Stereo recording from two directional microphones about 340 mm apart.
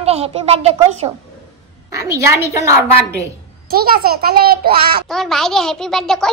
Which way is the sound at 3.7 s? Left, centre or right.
Right.